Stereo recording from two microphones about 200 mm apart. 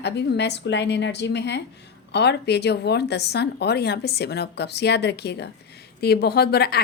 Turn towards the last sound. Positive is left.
turn(degrees=50)  # may be behind; listen again after turning